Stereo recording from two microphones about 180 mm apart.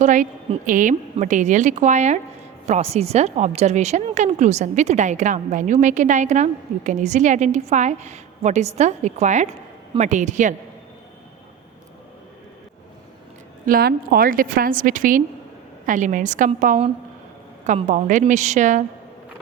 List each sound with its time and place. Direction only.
0.0 s a woman's voice: 45° right (ahead or behind)
13.7 s a woman's voice: 55° right (ahead or behind)